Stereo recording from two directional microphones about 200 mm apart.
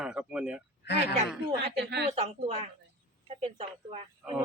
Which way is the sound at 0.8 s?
55° left (ahead or behind).